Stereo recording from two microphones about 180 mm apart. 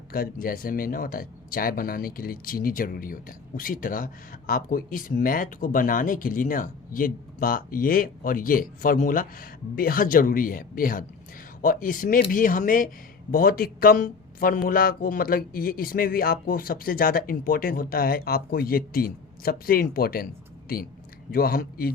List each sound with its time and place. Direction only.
0.1 s speech: 55° left (ahead or behind)
21.3 s speech: 55° left (ahead or behind)